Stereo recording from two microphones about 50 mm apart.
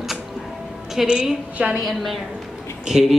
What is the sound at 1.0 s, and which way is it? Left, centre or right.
Speech, centre.